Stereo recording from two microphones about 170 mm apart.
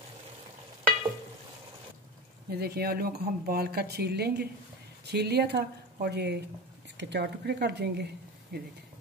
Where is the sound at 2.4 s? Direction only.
70° right (ahead or behind).